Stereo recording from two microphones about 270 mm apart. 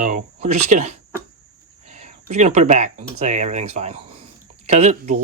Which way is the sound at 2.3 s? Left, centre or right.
Right.